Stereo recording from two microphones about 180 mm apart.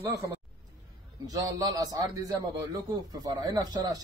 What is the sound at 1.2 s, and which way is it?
Speech, 20° right (ahead or behind).